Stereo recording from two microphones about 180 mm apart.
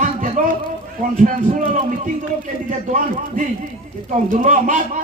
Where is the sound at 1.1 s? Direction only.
45° right (ahead or behind).